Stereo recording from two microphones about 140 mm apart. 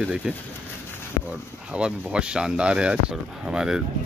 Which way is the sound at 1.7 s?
5° right (ahead or behind).